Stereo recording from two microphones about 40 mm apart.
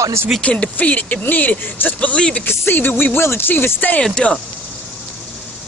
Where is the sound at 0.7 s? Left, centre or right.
Left.